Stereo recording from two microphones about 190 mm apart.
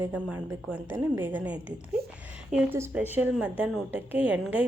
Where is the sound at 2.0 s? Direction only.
55° right (ahead or behind).